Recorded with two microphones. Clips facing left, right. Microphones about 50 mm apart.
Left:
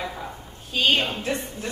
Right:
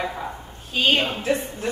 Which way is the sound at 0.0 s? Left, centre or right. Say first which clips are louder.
Right 4 dB; centre.